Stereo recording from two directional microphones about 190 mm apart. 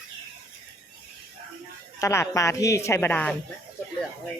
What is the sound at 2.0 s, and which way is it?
Speech, 15° left (ahead or behind).